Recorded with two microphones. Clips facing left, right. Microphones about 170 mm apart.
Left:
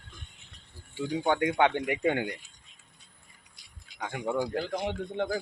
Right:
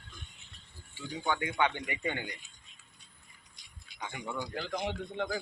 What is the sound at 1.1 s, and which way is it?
Speech, 70° left (ahead or behind).